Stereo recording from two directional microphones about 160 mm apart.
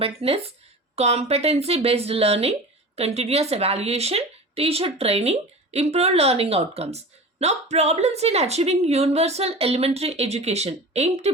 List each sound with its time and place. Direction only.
0.2 s speech: 40° right (ahead or behind)